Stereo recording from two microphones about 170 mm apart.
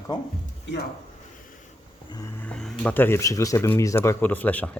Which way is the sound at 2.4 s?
5° left (ahead or behind).